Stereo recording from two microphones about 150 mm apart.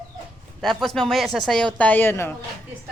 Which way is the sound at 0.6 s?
Centre (ahead or behind).